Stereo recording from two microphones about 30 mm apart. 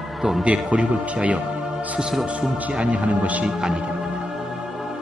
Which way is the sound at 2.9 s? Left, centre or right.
Right.